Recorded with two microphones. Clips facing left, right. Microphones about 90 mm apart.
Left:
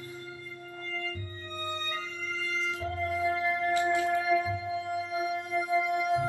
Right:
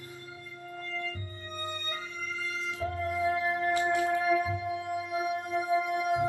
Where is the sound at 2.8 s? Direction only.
25° right (ahead or behind).